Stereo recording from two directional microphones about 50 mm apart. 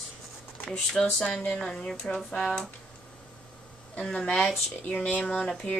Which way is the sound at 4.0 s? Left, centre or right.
Centre.